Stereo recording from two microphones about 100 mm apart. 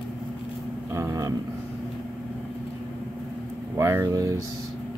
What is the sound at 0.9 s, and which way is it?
Speech, 35° right (ahead or behind).